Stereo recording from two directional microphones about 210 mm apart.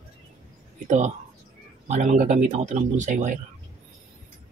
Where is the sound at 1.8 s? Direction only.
35° right (ahead or behind).